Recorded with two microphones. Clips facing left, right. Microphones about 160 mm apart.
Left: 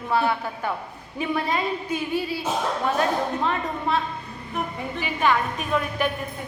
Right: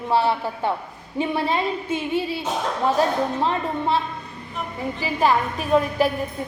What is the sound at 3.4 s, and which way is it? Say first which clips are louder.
Speech: right 3 dB; 30° right (ahead or behind).